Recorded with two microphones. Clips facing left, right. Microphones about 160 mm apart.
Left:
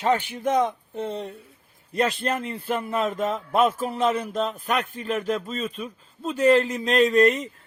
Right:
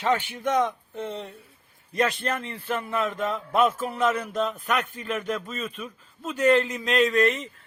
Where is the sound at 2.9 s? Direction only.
35° left (ahead or behind).